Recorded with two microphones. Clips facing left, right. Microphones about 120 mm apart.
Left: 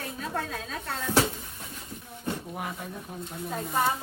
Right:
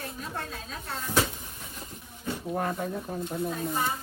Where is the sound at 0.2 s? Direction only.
65° left (ahead or behind).